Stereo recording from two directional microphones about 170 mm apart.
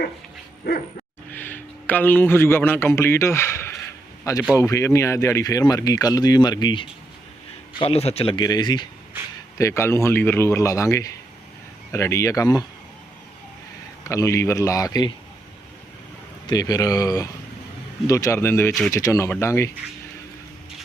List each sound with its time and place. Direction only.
0.7 s dog: 65° left (ahead or behind)
1.3 s a man's voice: 10° left (ahead or behind)
14.1 s speech: 15° left (ahead or behind)
16.5 s a man's voice: 20° left (ahead or behind)